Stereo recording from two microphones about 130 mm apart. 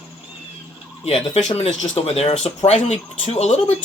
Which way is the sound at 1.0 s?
55° left (ahead or behind).